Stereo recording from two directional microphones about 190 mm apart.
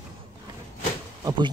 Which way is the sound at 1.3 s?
25° right (ahead or behind).